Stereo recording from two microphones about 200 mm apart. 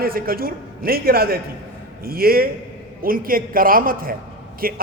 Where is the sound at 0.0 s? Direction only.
50° right (ahead or behind).